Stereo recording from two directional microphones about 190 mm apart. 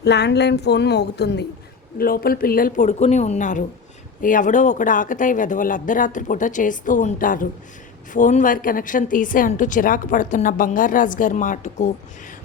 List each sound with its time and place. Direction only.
0.0 s speech: 65° left (ahead or behind)
2.0 s a woman's voice: 50° left (ahead or behind)